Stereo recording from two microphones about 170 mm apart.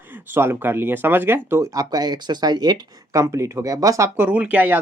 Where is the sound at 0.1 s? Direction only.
15° right (ahead or behind).